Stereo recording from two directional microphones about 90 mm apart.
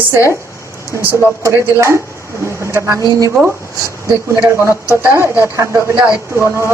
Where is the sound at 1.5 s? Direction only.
30° right (ahead or behind).